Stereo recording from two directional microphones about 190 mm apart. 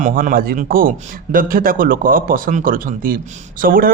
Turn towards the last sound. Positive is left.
turn(degrees=-50)  # may be behind; listen again after turning